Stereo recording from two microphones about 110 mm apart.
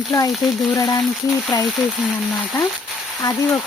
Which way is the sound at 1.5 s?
30° left (ahead or behind).